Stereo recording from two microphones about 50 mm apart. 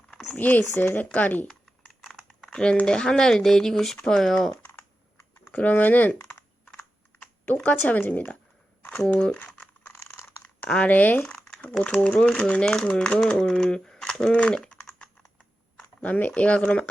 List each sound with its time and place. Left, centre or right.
0.3 s speech: left
2.5 s speech: centre
5.5 s speech: left
7.4 s speech: left
9.1 s speech: centre
9.5 s crumpling: centre
9.9 s crunch: left
10.7 s speech: left
11.9 s speech: centre
14.3 s speech: left
14.6 s typing: centre
15.8 s speech: left